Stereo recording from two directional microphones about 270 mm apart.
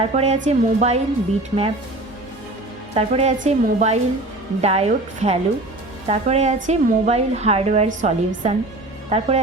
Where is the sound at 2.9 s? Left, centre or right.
Right.